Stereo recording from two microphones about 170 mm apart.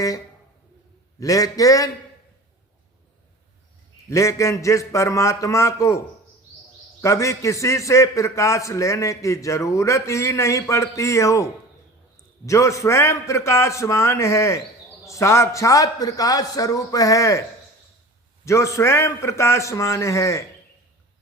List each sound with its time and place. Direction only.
1.2 s a man's voice: 20° left (ahead or behind)
4.1 s a man's voice: 15° left (ahead or behind)
7.0 s a man's voice: 15° left (ahead or behind)
18.4 s a man's voice: 15° left (ahead or behind)